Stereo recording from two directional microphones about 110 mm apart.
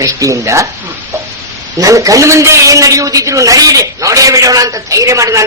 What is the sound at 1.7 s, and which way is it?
Speech, 30° right (ahead or behind).